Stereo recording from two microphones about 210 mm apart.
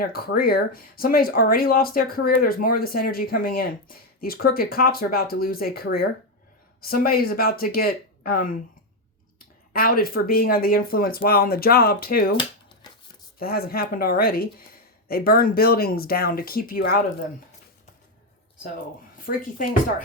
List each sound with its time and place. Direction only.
0.0 s speech: 45° left (ahead or behind)
9.7 s speech: 45° left (ahead or behind)
12.4 s a sound: 20° left (ahead or behind)
13.4 s speech: 45° left (ahead or behind)
19.2 s speech: 40° left (ahead or behind)